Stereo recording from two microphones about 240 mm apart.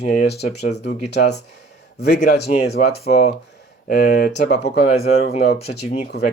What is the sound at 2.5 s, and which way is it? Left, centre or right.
Speech, left.